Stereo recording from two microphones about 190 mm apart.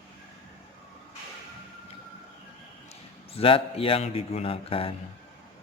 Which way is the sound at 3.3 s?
30° left (ahead or behind).